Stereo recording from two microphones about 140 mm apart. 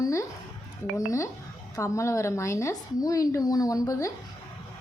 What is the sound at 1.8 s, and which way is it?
Speech, 20° left (ahead or behind).